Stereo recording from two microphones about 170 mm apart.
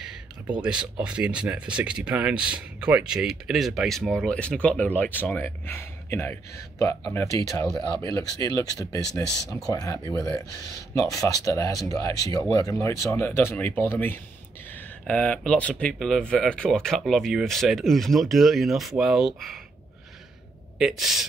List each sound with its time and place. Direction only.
0.0 s speech: 5° right (ahead or behind); by 9.9 s 20° left (ahead or behind)
11.0 s speech: 20° left (ahead or behind); by 19.6 s centre (ahead or behind)
20.8 s speech: centre (ahead or behind)